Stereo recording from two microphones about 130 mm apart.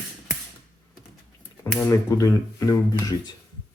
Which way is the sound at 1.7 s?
10° left (ahead or behind).